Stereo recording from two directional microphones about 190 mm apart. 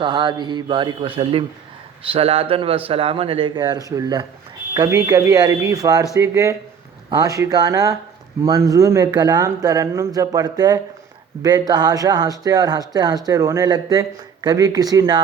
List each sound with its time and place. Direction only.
0.0 s a man's voice: 25° right (ahead or behind)